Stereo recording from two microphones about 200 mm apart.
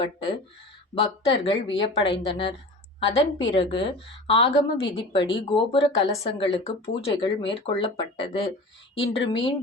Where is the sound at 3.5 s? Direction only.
25° left (ahead or behind).